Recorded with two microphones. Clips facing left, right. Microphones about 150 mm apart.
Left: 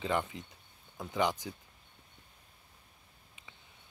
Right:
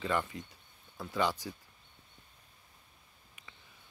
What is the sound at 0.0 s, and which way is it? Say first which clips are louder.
Speech: even; 20° left (ahead or behind).